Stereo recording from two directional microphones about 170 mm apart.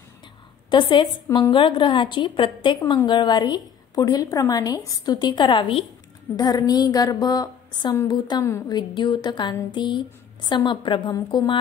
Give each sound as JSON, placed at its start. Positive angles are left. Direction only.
{"t": 0.7, "sound": "a woman's voice", "side_deg": 30}